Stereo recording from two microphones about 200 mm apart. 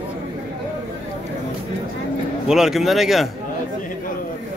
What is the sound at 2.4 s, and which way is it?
Speech, centre (ahead or behind).